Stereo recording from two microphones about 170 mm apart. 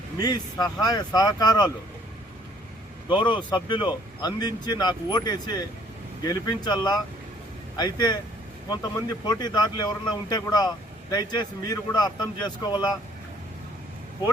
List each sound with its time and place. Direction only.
0.2 s a man's voice: 25° left (ahead or behind)
3.1 s a man's voice: 30° left (ahead or behind)